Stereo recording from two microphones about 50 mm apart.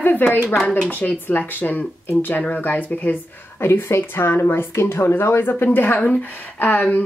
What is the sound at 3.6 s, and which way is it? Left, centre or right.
Speech, left.